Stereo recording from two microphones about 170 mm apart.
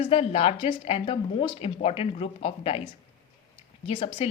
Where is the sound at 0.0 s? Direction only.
35° left (ahead or behind).